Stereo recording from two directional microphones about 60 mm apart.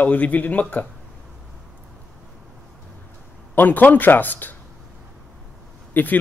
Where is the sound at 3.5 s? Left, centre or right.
Left.